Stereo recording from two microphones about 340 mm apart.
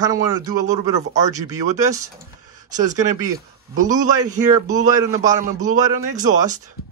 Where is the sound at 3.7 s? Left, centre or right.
Right.